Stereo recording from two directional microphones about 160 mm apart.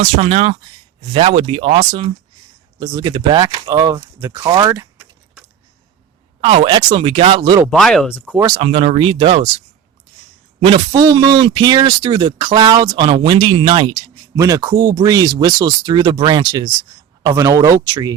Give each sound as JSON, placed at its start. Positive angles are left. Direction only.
{"t": 0.0, "sound": "a man's voice", "side_deg": -40}
{"t": 2.7, "sound": "speech", "side_deg": -25}
{"t": 6.4, "sound": "a man's voice", "side_deg": -35}
{"t": 7.7, "sound": "speech", "side_deg": 5}
{"t": 8.5, "sound": "a man's voice", "side_deg": -35}